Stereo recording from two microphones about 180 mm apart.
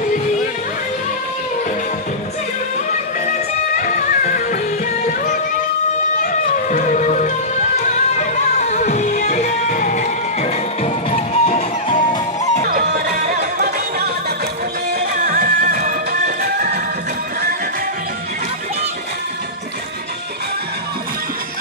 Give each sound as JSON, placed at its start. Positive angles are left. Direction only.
{"t": 3.7, "sound": "music", "side_deg": 45}
{"t": 12.6, "sound": "music", "side_deg": -55}